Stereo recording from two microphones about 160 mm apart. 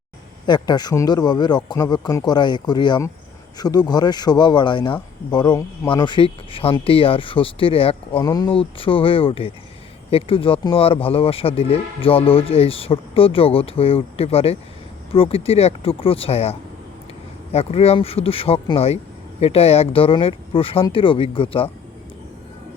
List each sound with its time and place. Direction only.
0.4 s speech: 30° left (ahead or behind)
8.2 s speech: 25° left (ahead or behind)
8.4 s speech: 35° left (ahead or behind)